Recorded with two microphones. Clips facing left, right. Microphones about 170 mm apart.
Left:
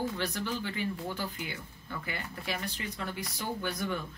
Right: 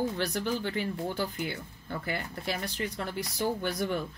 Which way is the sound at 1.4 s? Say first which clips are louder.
Right 5 dB; 40° right (ahead or behind).